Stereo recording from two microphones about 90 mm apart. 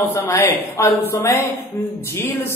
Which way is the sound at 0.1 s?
30° left (ahead or behind).